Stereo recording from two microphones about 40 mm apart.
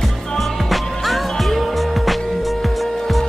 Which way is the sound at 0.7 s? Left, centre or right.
Centre.